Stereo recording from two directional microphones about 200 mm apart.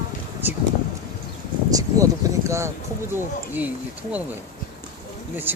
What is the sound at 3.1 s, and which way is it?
Speech, 10° right (ahead or behind).